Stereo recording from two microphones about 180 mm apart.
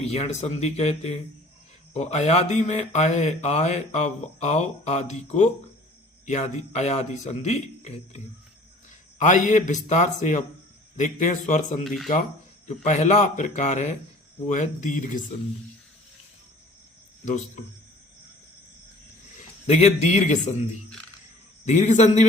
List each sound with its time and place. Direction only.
0.0 s a man's voice: 35° left (ahead or behind)
11.8 s speech: centre (ahead or behind)
12.6 s a man's voice: 40° left (ahead or behind)
17.2 s speech: 40° left (ahead or behind)
19.6 s speech: 40° left (ahead or behind)